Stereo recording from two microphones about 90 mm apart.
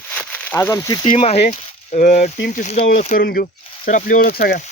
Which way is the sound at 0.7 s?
40° left (ahead or behind).